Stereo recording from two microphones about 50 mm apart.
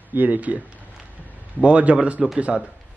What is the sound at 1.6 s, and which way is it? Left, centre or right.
A man's voice, right.